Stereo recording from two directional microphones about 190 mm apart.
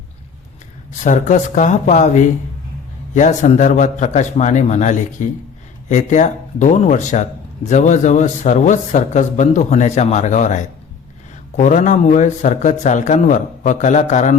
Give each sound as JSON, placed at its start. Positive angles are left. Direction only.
{"t": 1.0, "sound": "speech", "side_deg": 40}